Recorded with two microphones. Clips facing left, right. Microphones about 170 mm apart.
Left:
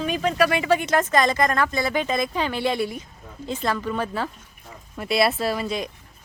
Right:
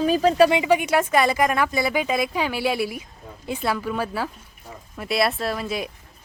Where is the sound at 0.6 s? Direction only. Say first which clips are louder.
Right 1 dB; 15° right (ahead or behind).